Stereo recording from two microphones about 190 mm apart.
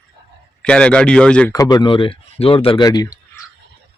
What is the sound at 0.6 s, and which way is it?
Speech, 5° left (ahead or behind).